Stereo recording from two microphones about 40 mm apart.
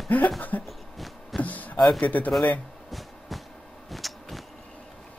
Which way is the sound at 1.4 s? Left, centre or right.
Left.